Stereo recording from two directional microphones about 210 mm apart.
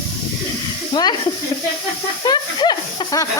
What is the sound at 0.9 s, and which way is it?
Speech, 20° left (ahead or behind).